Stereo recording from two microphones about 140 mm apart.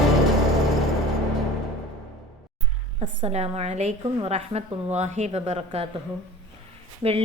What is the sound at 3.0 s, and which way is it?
A woman's voice, 45° right (ahead or behind).